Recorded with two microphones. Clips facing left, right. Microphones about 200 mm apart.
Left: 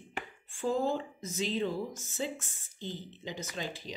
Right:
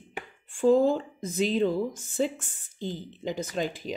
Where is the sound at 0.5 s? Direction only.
55° right (ahead or behind).